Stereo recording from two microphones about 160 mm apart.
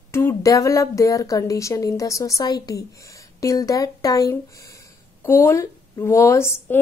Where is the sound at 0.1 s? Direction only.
15° left (ahead or behind).